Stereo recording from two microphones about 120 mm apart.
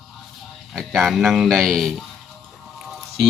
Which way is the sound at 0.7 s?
5° right (ahead or behind).